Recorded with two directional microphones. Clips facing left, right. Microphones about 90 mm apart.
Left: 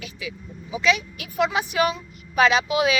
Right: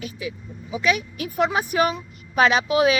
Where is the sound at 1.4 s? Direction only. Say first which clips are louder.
Right 1 dB; 45° right (ahead or behind).